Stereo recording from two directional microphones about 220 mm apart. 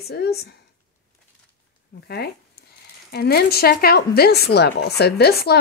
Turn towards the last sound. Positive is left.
turn(degrees=45)  # may be behind; listen again after turning